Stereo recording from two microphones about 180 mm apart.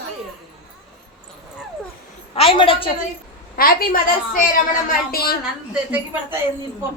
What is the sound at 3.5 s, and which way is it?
A woman's voice, 55° left (ahead or behind).